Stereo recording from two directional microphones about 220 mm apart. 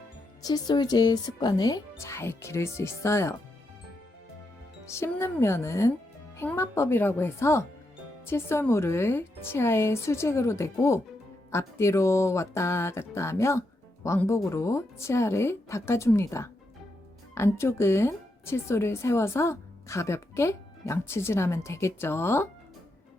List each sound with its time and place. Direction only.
0.4 s speech: 20° left (ahead or behind)
4.9 s speech: 10° left (ahead or behind)